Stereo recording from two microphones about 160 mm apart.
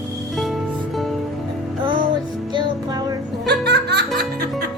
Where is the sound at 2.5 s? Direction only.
25° right (ahead or behind).